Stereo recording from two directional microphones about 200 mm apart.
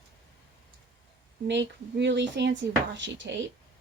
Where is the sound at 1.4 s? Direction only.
60° right (ahead or behind).